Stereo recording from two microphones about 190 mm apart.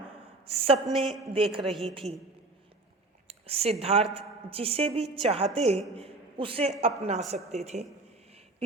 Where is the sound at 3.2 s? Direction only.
30° right (ahead or behind).